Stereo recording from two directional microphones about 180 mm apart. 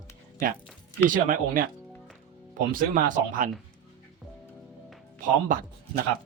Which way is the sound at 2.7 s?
50° right (ahead or behind).